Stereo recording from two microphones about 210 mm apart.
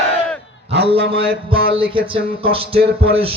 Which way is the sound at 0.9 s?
50° right (ahead or behind).